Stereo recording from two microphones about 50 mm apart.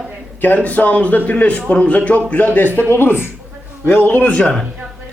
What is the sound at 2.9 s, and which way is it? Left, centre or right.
Speech, left.